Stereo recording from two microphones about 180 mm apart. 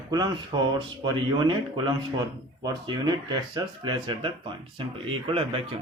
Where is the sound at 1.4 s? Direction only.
25° right (ahead or behind).